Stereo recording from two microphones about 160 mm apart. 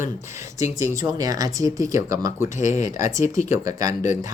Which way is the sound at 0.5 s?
20° right (ahead or behind).